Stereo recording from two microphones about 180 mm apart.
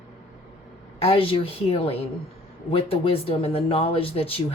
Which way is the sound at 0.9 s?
30° left (ahead or behind).